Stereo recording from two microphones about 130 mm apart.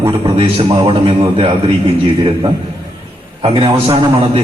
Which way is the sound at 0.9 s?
45° right (ahead or behind).